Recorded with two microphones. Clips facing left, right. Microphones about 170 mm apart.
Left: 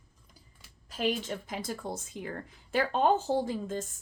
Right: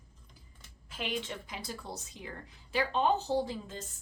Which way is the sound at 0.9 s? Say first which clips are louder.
Left 6 dB; 40° left (ahead or behind).